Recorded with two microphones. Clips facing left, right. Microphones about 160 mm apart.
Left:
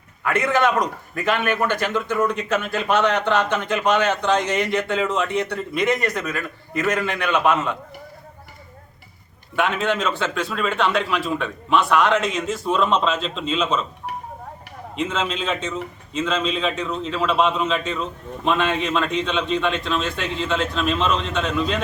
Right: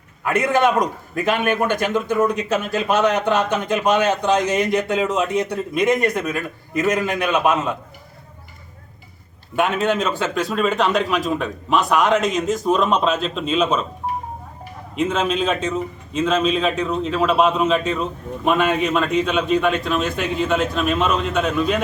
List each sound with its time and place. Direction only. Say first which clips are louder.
0.3 s a man's voice: right 2 dB; 20° right (ahead or behind)
9.8 s a man's voice: right 2 dB; 10° right (ahead or behind)
15.0 s a man's voice: right 5 dB; 15° right (ahead or behind)